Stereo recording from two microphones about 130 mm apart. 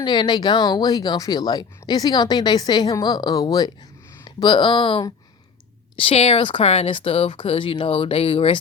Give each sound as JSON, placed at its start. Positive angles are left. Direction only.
{"t": 0.0, "sound": "a woman's voice", "side_deg": 35}